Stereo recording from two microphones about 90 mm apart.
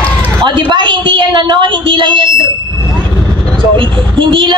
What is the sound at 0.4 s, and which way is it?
A woman's voice, 60° right (ahead or behind).